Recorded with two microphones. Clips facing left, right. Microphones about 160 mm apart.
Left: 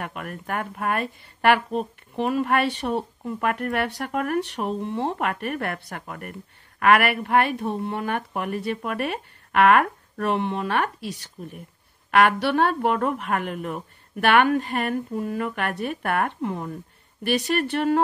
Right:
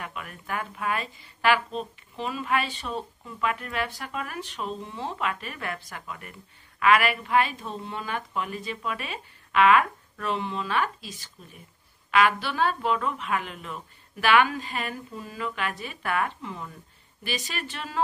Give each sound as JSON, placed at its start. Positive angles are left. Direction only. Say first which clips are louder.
{"t": 0.0, "sound": "speech", "louder": "left 5 dB", "side_deg": 60}